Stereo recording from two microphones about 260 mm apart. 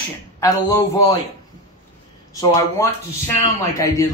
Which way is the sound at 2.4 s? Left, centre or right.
Centre.